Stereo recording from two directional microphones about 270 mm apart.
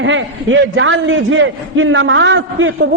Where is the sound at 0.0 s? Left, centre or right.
Right.